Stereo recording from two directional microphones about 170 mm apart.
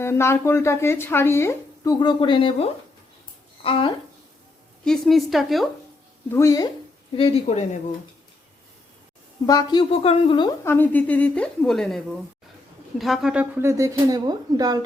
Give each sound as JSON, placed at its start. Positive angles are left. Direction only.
{"t": 0.0, "sound": "speech", "side_deg": 15}
{"t": 4.9, "sound": "a woman's voice", "side_deg": 0}
{"t": 6.3, "sound": "a woman's voice", "side_deg": 20}
{"t": 7.4, "sound": "speech", "side_deg": 40}
{"t": 9.5, "sound": "a woman's voice", "side_deg": 25}
{"t": 10.6, "sound": "speech", "side_deg": 15}